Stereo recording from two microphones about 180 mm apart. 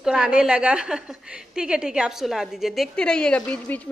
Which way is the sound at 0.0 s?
5° right (ahead or behind).